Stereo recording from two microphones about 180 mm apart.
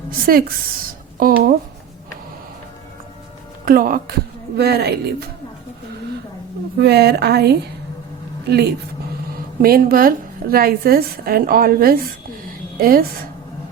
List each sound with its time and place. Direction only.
0.3 s speech: 55° right (ahead or behind)
3.7 s speech: 50° right (ahead or behind)
4.5 s a woman's voice: 65° right (ahead or behind)
6.7 s a woman's voice: 65° right (ahead or behind)
9.6 s a woman's voice: 55° right (ahead or behind)